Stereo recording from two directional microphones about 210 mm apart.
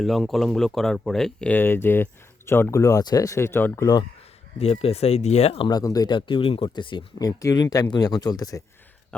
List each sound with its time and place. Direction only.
0.0 s speech: centre (ahead or behind); by 4.0 s 15° left (ahead or behind)
4.5 s speech: 30° left (ahead or behind)